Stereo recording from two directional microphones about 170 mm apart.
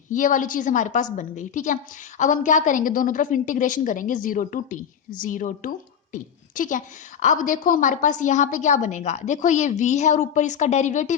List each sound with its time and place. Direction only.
0.1 s a woman's voice: 50° left (ahead or behind)